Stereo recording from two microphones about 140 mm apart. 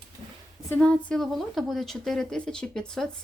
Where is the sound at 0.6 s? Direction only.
10° left (ahead or behind).